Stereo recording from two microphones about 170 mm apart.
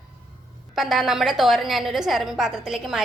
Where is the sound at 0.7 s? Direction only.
Centre (ahead or behind).